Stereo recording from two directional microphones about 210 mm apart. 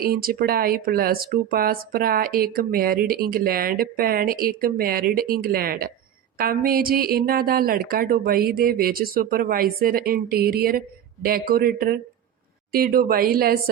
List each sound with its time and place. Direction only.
0.0 s speech: 45° right (ahead or behind)